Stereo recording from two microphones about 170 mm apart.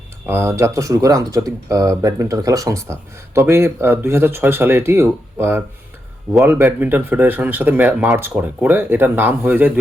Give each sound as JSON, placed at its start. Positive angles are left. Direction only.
{"t": 0.3, "sound": "speech", "side_deg": -15}